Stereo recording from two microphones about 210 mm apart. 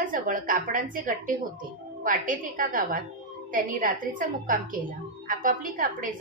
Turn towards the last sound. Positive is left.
turn(degrees=-40)  # may be behind; listen again after turning